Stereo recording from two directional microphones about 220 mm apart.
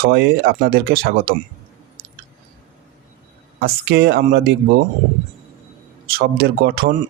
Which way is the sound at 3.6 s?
45° right (ahead or behind).